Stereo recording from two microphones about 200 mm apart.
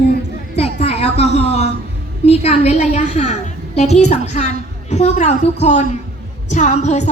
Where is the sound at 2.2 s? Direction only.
30° left (ahead or behind).